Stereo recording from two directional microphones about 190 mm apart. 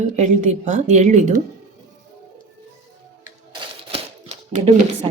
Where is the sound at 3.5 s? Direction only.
30° right (ahead or behind).